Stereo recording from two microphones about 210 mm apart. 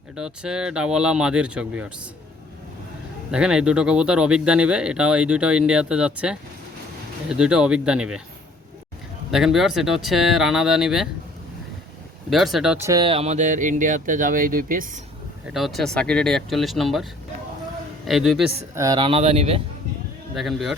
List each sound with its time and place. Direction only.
0.2 s speech: 5° right (ahead or behind)
3.3 s speech: 5° right (ahead or behind)
9.3 s speech: centre (ahead or behind)
12.3 s speech: centre (ahead or behind)
12.8 s speech: 20° right (ahead or behind); by 15.0 s 40° right (ahead or behind)
15.5 s speech: centre (ahead or behind)
18.7 s speech: 15° right (ahead or behind)
20.3 s speech: centre (ahead or behind)